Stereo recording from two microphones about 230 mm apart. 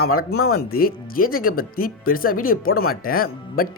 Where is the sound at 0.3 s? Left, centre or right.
Left.